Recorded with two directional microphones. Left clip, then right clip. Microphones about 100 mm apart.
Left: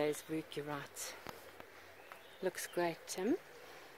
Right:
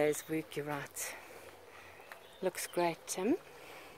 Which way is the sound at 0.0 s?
5° right (ahead or behind).